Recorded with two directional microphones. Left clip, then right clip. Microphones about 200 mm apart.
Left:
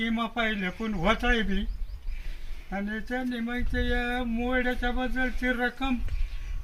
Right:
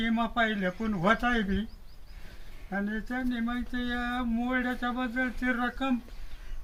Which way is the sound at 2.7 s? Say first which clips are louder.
Left 1 dB; 10° right (ahead or behind).